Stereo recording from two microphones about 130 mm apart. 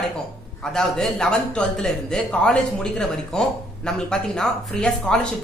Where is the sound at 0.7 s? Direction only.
5° left (ahead or behind).